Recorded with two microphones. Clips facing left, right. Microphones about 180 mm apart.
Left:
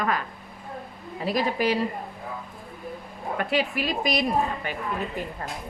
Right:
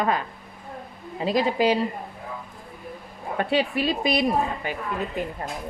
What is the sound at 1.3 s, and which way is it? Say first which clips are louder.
Speech: right 3 dB; 20° right (ahead or behind).